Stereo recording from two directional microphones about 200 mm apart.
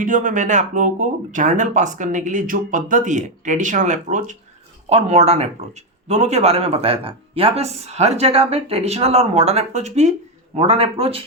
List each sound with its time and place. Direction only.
0.0 s speech: 40° right (ahead or behind)